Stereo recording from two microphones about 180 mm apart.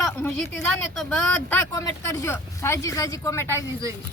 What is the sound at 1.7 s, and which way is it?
Speech, 20° left (ahead or behind).